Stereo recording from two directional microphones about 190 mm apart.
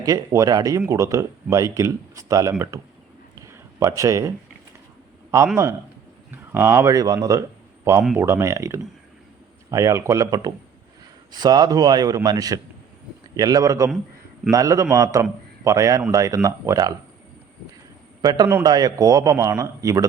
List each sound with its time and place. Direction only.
0.0 s a man's voice: 20° right (ahead or behind)
3.4 s a sound: 15° right (ahead or behind)
6.3 s a man's voice: 10° right (ahead or behind)
18.2 s speech: 20° right (ahead or behind)